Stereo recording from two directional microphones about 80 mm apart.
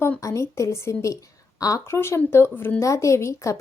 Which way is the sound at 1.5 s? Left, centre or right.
Left.